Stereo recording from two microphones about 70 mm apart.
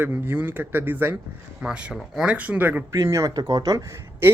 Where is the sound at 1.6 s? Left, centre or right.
Centre.